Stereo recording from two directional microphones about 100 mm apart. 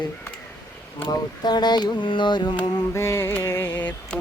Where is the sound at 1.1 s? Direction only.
45° left (ahead or behind).